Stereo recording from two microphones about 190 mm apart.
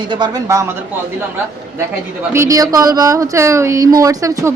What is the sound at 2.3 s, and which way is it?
Speech, 15° right (ahead or behind).